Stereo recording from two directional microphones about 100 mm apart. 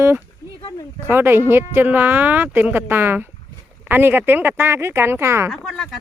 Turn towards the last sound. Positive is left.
turn(degrees=0)  # may be behind; listen again after turning